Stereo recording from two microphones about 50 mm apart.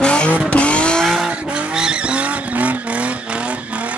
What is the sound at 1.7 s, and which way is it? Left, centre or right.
Vehicle, centre.